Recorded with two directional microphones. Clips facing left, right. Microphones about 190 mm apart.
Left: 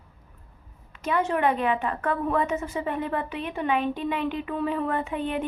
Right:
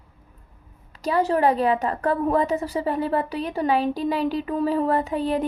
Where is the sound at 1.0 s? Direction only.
35° right (ahead or behind).